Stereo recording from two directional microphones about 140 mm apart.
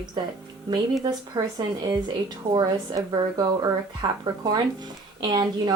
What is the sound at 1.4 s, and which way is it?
Speech, 30° right (ahead or behind).